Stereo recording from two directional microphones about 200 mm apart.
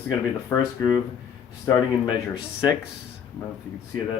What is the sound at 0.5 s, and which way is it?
Speech, 10° left (ahead or behind).